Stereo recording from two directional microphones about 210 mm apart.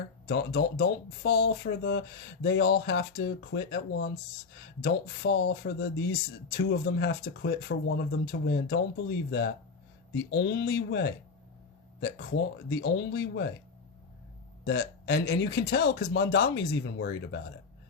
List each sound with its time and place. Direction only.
0.3 s speech: 50° left (ahead or behind)
14.6 s speech: 50° left (ahead or behind)